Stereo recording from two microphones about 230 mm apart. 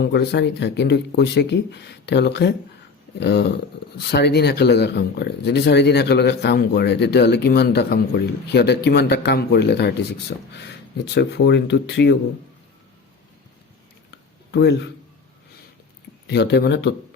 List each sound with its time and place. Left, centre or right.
0.0 s speech: left
14.1 s a sound: left
16.2 s speech: left